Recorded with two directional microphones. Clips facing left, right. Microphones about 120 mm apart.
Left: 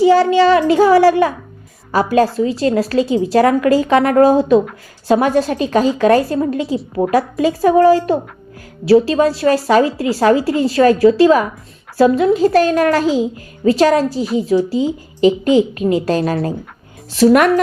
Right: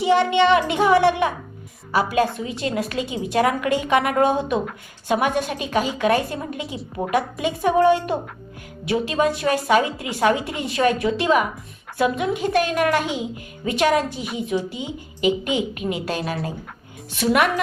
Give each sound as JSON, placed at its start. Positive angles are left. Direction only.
{"t": 0.0, "sound": "a child's voice", "side_deg": 35}